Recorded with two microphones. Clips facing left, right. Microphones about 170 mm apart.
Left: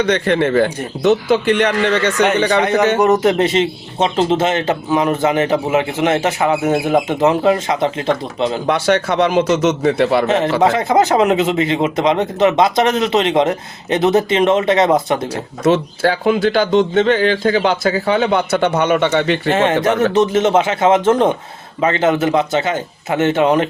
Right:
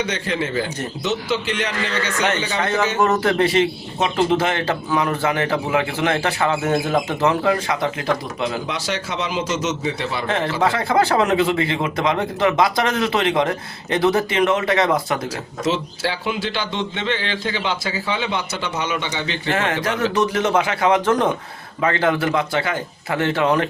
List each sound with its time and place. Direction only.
0.0 s a man's voice: 60° left (ahead or behind)
2.6 s a man's voice: 20° left (ahead or behind)
8.6 s a man's voice: 60° left (ahead or behind)
10.2 s a man's voice: 20° left (ahead or behind)
15.6 s a man's voice: 55° left (ahead or behind)
19.5 s a man's voice: 25° left (ahead or behind)
19.9 s a man's voice: 50° left (ahead or behind)
20.1 s a man's voice: 25° left (ahead or behind)